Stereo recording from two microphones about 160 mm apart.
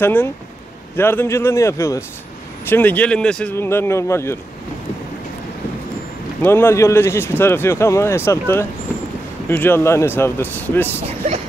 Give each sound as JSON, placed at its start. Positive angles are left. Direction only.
{"t": 0.0, "sound": "speech", "side_deg": 15}
{"t": 6.4, "sound": "speech", "side_deg": 15}
{"t": 11.1, "sound": "speech", "side_deg": -45}